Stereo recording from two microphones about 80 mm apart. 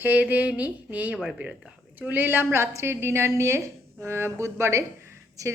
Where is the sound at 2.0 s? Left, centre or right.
Right.